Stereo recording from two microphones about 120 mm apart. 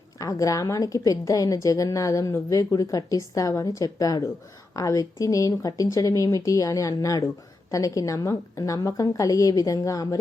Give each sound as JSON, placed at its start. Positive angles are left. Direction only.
{"t": 0.2, "sound": "a woman's voice", "side_deg": 30}